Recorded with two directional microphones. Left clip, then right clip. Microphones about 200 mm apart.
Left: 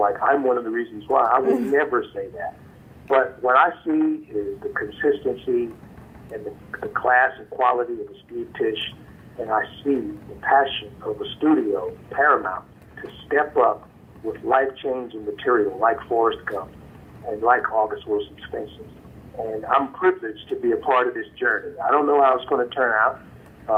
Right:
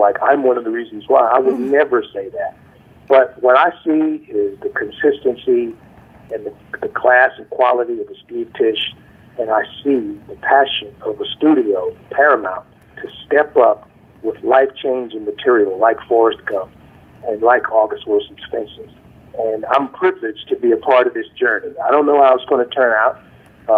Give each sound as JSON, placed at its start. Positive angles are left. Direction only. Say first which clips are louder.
{"t": 0.0, "sound": "speech", "louder": "right 6 dB", "side_deg": -45}